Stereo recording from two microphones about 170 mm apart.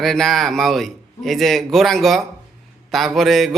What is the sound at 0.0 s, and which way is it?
A man's voice, centre (ahead or behind).